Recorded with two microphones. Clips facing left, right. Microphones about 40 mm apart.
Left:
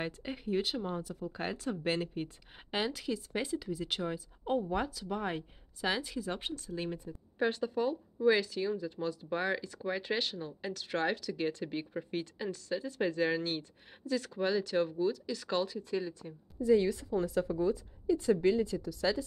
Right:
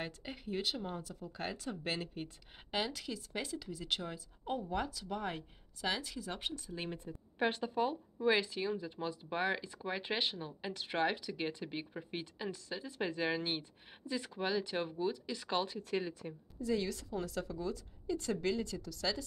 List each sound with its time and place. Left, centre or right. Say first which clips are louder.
0.0 s speech: left 5 dB; centre
6.5 s speech: left 4 dB; centre
7.3 s speech: left 2 dB; centre
11.6 s speech: left 5 dB; centre
16.5 s speech: left 9 dB; centre
17.5 s a woman's voice: left 9 dB; left
18.0 s speech: left 8 dB; centre